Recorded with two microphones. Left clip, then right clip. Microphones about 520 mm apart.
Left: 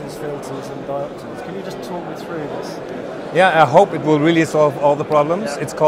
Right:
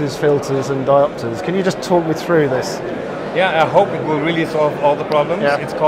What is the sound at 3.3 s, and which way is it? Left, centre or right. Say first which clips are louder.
Speech: left 2 dB; left.